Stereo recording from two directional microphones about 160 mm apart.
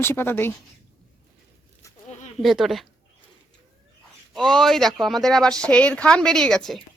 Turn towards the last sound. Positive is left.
turn(degrees=5)  # may be behind; listen again after turning